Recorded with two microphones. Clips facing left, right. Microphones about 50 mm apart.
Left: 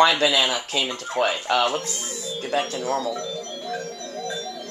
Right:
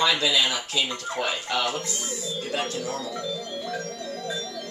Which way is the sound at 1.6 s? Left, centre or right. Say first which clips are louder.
Left 3 dB; left.